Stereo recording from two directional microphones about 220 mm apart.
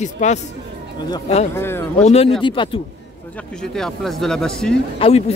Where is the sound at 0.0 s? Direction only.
35° left (ahead or behind).